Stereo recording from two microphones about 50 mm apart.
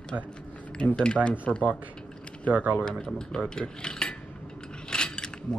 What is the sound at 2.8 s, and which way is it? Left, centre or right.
Speech, centre.